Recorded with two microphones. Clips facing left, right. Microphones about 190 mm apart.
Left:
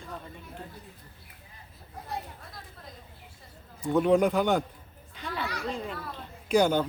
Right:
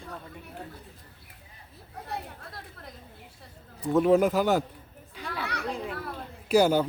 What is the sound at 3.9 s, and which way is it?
Speech, centre (ahead or behind).